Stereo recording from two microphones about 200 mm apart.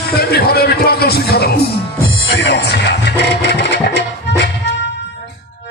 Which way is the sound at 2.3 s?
55° left (ahead or behind).